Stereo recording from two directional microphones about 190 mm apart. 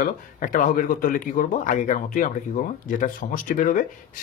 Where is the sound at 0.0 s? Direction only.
45° left (ahead or behind).